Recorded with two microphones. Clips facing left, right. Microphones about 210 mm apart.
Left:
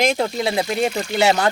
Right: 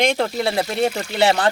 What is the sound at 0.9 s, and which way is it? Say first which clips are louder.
Speech: left 2 dB; 5° right (ahead or behind).